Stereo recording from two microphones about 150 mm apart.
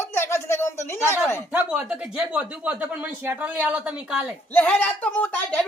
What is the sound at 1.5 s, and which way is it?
Speech, 5° right (ahead or behind).